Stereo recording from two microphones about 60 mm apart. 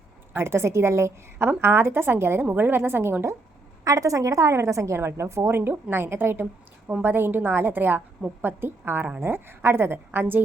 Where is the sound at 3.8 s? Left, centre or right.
Right.